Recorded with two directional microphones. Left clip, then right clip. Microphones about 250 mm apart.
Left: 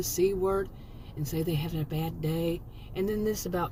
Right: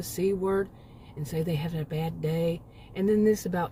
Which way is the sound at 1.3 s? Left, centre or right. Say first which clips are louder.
Right 1 dB; centre.